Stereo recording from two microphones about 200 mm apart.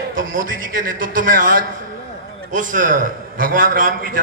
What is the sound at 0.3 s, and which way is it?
A man's voice, 45° right (ahead or behind).